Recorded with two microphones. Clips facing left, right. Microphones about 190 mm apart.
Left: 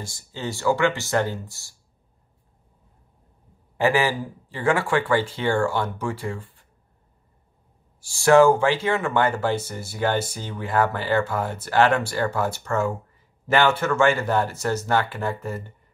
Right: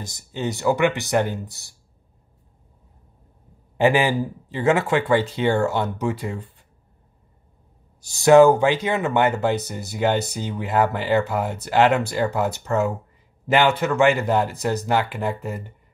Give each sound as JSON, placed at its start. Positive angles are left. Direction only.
{"t": 0.0, "sound": "speech", "side_deg": -20}
{"t": 3.7, "sound": "speech", "side_deg": -20}
{"t": 8.0, "sound": "speech", "side_deg": -20}